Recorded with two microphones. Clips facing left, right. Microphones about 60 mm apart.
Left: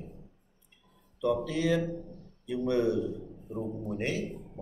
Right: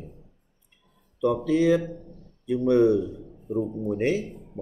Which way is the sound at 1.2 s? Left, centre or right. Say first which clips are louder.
Right 7 dB; right.